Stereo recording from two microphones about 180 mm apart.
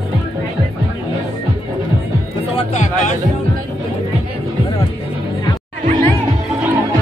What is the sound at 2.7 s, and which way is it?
Music, 45° left (ahead or behind).